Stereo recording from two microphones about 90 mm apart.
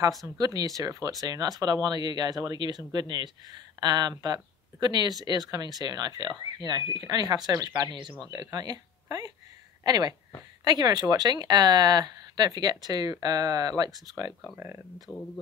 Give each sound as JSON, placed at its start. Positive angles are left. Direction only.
{"t": 0.4, "sound": "speech", "side_deg": -45}